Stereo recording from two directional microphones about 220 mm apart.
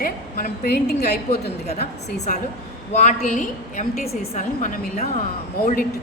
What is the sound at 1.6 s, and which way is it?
A woman's voice, 30° left (ahead or behind).